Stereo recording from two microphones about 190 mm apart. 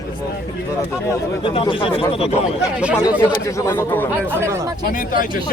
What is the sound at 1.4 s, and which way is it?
Speech, 25° left (ahead or behind).